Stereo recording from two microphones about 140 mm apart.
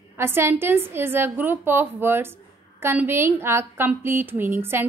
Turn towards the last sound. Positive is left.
turn(degrees=-15)  # may be behind; listen again after turning